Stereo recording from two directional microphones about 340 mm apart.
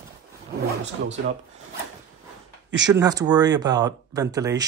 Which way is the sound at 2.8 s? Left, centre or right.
Centre.